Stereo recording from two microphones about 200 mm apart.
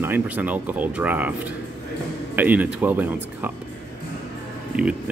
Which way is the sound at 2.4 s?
10° right (ahead or behind).